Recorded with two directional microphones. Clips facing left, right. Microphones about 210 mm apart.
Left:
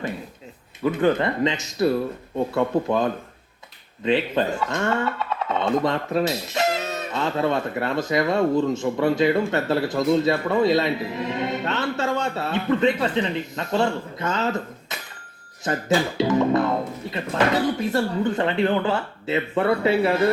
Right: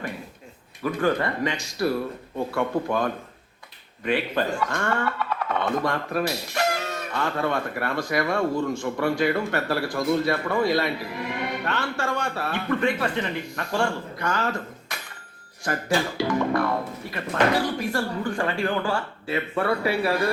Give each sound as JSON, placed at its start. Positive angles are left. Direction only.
{"t": 0.9, "sound": "speech", "side_deg": 20}